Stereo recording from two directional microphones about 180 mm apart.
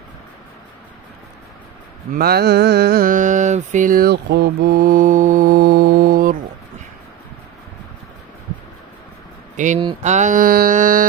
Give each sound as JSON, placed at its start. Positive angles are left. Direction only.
{"t": 2.1, "sound": "mantra", "side_deg": -60}
{"t": 9.6, "sound": "mantra", "side_deg": -45}